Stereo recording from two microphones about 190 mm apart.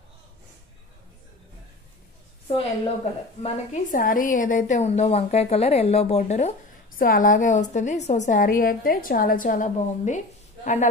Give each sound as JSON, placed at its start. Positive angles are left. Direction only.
{"t": 3.4, "sound": "a woman's voice", "side_deg": 40}